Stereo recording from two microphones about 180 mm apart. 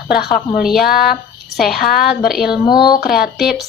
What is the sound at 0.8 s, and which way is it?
Speech, 55° left (ahead or behind).